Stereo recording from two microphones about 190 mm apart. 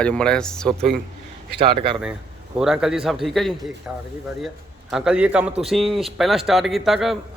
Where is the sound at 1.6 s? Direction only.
25° right (ahead or behind).